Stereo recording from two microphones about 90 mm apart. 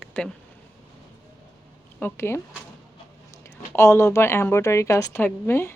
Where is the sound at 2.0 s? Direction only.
30° left (ahead or behind).